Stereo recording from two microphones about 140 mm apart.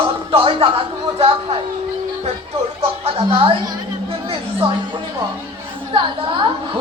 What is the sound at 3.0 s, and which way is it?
A woman's voice, 45° right (ahead or behind).